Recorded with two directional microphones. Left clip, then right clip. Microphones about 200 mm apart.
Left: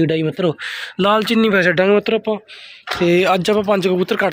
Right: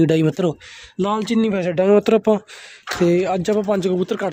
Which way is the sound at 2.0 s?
40° right (ahead or behind).